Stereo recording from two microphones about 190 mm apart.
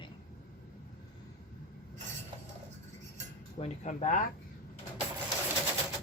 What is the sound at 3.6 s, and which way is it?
Speech, 35° left (ahead or behind).